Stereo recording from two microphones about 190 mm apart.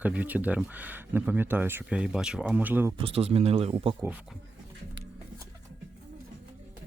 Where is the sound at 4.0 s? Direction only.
10° right (ahead or behind).